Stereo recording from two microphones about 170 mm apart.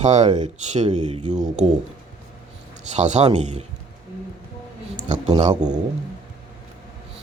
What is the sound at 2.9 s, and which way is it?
Speech, 40° right (ahead or behind).